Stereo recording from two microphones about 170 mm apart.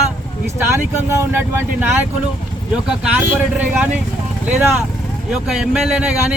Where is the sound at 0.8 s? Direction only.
15° right (ahead or behind).